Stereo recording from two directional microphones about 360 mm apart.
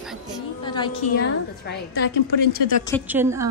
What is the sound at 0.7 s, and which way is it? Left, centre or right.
Speech, centre.